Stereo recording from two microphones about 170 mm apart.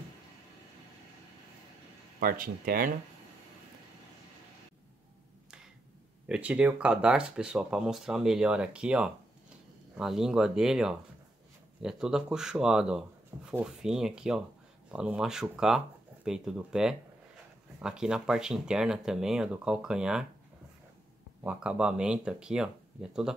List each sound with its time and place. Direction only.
2.1 s speech: 55° right (ahead or behind)
6.2 s speech: 5° right (ahead or behind)
21.5 s speech: 5° right (ahead or behind)